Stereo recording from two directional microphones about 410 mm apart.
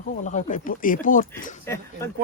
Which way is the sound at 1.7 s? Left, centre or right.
Centre.